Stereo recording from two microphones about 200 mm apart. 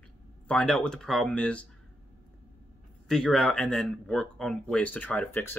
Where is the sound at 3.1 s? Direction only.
5° left (ahead or behind).